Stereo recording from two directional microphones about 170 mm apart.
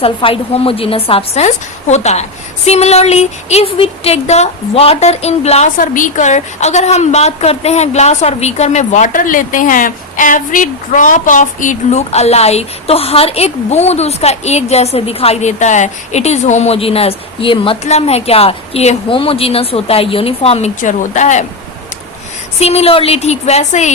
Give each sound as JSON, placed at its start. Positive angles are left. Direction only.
{"t": 0.0, "sound": "speech", "side_deg": 35}
{"t": 22.6, "sound": "speech", "side_deg": 35}